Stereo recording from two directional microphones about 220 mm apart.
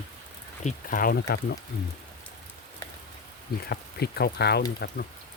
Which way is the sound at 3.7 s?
45° left (ahead or behind).